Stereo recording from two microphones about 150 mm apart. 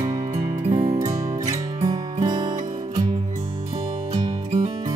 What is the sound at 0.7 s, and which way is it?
Music, 25° right (ahead or behind).